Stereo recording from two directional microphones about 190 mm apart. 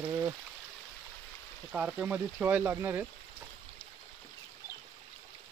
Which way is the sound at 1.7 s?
5° right (ahead or behind).